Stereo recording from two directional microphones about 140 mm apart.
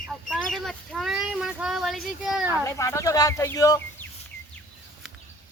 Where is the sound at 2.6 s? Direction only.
20° left (ahead or behind).